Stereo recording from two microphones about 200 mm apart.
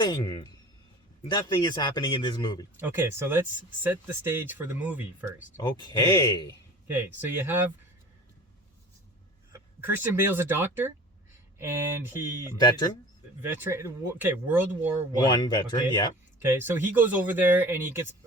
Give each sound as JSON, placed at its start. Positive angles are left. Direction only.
{"t": 0.0, "sound": "a man's voice", "side_deg": 20}
{"t": 2.7, "sound": "speech", "side_deg": -10}
{"t": 5.5, "sound": "a man's voice", "side_deg": 20}
{"t": 6.8, "sound": "speech", "side_deg": -10}
{"t": 9.5, "sound": "speech", "side_deg": -10}
{"t": 15.2, "sound": "a man's voice", "side_deg": 20}
{"t": 16.4, "sound": "speech", "side_deg": -10}